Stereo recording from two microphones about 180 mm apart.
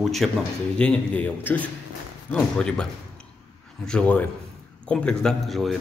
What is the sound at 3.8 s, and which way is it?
A man's voice, 5° left (ahead or behind).